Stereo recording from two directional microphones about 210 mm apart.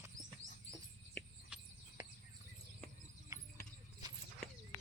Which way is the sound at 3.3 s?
15° right (ahead or behind).